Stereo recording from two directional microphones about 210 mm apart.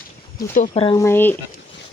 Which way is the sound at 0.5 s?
35° left (ahead or behind).